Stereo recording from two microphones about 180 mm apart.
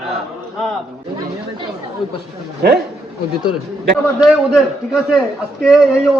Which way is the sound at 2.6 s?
60° right (ahead or behind).